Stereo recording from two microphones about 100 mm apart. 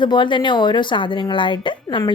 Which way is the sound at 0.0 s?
50° left (ahead or behind).